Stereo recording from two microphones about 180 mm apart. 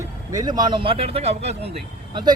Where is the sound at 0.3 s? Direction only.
20° right (ahead or behind); by 1.7 s 35° right (ahead or behind).